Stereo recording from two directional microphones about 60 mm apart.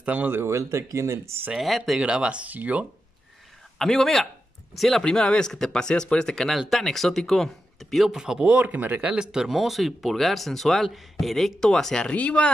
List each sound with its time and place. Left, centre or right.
0.0 s speech: right
0.3 s speech: right
1.6 s speech: centre
2.0 s speech: centre
3.7 s speech: centre
5.0 s speech: centre; by 9.1 s right
9.1 s speech: centre; by 12.4 s left